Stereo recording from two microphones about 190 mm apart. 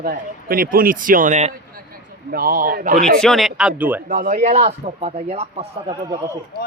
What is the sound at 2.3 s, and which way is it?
Speech, 50° right (ahead or behind).